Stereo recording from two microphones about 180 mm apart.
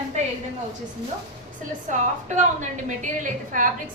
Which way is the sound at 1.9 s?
45° right (ahead or behind).